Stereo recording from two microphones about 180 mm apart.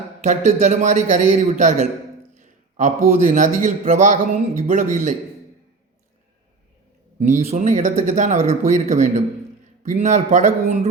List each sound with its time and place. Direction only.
0.2 s a man's voice: 40° right (ahead or behind)
2.4 s a sound: 45° right (ahead or behind)
3.2 s speech: 45° right (ahead or behind)
7.2 s speech: 40° right (ahead or behind)